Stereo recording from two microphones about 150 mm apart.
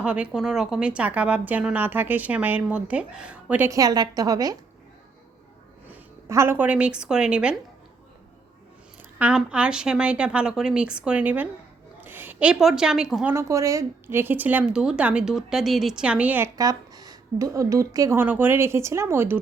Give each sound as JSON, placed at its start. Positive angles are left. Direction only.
{"t": 0.0, "sound": "speech", "side_deg": -5}
{"t": 3.7, "sound": "a woman's voice", "side_deg": -25}
{"t": 6.2, "sound": "speech", "side_deg": -20}
{"t": 9.1, "sound": "a woman's voice", "side_deg": -10}
{"t": 13.3, "sound": "speech", "side_deg": -20}
{"t": 16.6, "sound": "a woman's voice", "side_deg": -25}